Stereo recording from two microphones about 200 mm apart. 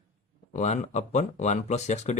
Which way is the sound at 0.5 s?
35° left (ahead or behind).